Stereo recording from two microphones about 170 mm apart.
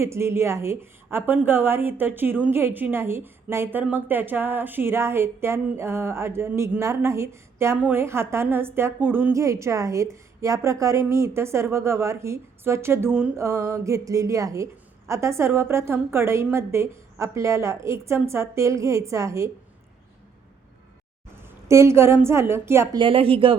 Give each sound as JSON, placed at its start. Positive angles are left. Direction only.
{"t": 0.0, "sound": "a woman's voice", "side_deg": -15}
{"t": 21.4, "sound": "a woman's voice", "side_deg": -15}
{"t": 23.0, "sound": "speech", "side_deg": -30}